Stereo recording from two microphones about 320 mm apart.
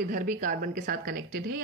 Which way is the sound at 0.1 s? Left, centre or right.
Right.